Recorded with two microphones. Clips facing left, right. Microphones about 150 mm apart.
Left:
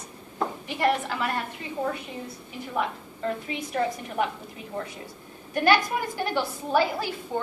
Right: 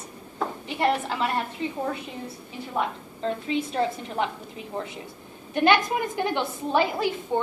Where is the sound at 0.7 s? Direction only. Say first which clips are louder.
Right 1 dB; 25° right (ahead or behind).